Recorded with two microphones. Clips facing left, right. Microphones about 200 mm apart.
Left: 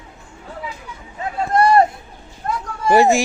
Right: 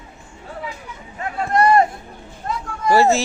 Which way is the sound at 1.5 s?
35° left (ahead or behind).